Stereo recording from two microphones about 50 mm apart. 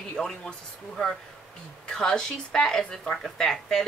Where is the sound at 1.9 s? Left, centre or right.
Centre.